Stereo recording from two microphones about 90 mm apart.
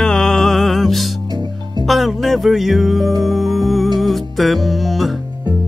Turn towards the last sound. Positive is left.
turn(degrees=0)  # may be behind; listen again after turning